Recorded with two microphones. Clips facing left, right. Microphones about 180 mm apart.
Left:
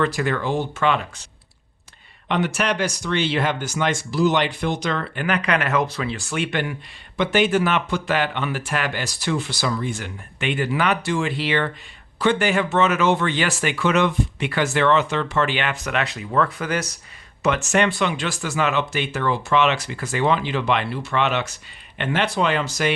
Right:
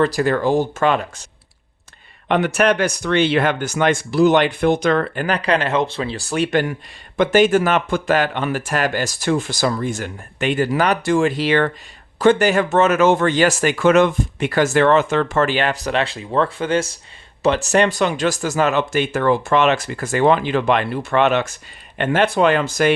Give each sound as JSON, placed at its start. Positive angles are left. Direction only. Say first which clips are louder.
{"t": 0.0, "sound": "speech", "louder": "right 5 dB", "side_deg": -40}
{"t": 5.2, "sound": "speech", "louder": "right 3 dB", "side_deg": -35}